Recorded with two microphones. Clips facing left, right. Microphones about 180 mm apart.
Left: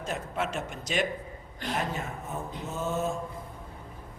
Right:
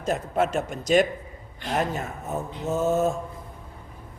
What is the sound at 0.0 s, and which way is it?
Speech, 40° right (ahead or behind).